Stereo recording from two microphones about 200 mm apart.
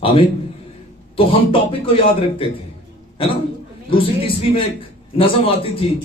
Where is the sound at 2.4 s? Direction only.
25° left (ahead or behind).